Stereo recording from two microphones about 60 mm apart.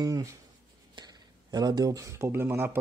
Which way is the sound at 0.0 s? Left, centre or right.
Right.